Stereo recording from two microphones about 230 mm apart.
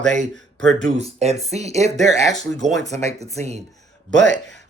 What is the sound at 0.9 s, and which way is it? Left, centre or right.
Speech, right.